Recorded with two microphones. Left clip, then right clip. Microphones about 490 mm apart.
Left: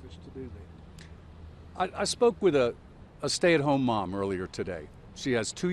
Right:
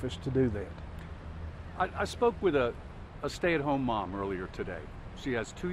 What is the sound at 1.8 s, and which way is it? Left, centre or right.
Speech, left.